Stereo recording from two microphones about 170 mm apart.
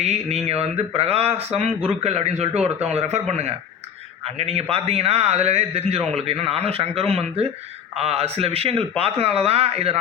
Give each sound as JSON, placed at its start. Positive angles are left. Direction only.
{"t": 0.0, "sound": "a man's voice", "side_deg": -40}